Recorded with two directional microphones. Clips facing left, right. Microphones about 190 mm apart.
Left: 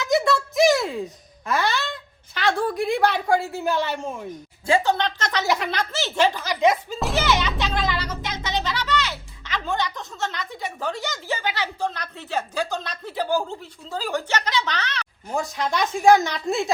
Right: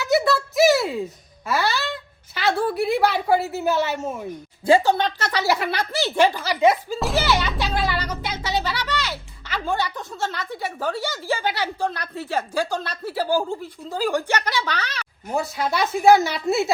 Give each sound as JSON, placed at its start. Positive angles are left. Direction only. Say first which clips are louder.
{"t": 0.3, "sound": "a sound", "louder": "right 1 dB", "side_deg": -5}
{"t": 1.5, "sound": "music", "louder": "right 1 dB", "side_deg": 0}
{"t": 2.3, "sound": "a woman's voice", "louder": "right 1 dB", "side_deg": -5}
{"t": 4.6, "sound": "a woman's voice", "louder": "right 4 dB", "side_deg": -30}
{"t": 4.9, "sound": "a woman's voice", "louder": "right 2 dB", "side_deg": -10}